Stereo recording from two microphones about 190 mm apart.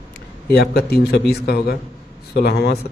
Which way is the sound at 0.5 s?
55° left (ahead or behind).